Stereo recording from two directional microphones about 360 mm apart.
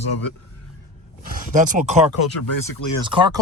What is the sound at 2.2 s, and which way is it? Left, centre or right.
Speech, left.